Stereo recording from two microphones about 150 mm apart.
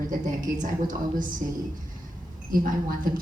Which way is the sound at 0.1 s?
60° right (ahead or behind).